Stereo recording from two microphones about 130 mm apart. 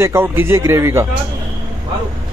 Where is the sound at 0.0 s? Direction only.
20° right (ahead or behind).